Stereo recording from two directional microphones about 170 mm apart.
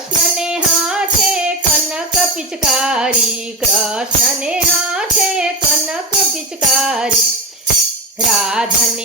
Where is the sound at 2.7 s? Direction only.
5° right (ahead or behind).